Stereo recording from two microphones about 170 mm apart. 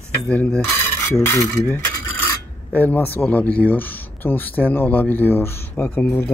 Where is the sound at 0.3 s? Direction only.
10° left (ahead or behind).